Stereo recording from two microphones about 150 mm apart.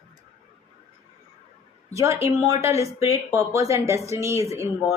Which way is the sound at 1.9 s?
20° right (ahead or behind).